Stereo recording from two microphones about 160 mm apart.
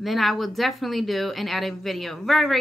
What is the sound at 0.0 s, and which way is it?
A woman's voice, centre (ahead or behind).